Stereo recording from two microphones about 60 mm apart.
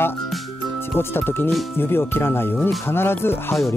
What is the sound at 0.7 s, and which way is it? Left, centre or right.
Speech, left.